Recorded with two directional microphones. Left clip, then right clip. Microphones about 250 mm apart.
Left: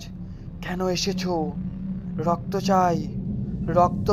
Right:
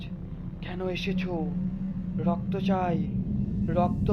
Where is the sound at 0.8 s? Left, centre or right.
Left.